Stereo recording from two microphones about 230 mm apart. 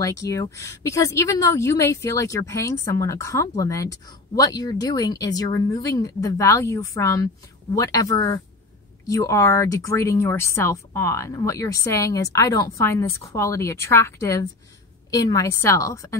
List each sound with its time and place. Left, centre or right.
0.0 s speech: centre